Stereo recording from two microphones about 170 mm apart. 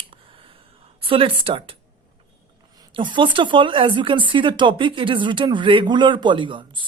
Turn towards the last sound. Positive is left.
turn(degrees=-30)  # may be behind; listen again after turning